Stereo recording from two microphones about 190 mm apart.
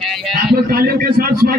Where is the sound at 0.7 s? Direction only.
50° right (ahead or behind).